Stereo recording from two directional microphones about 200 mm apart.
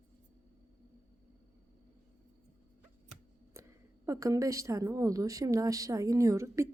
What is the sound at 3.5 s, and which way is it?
A woman's voice, 15° right (ahead or behind).